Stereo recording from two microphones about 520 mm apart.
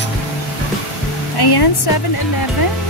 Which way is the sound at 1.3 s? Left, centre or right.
Left.